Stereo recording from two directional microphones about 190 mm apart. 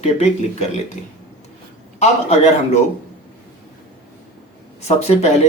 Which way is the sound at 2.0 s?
35° left (ahead or behind).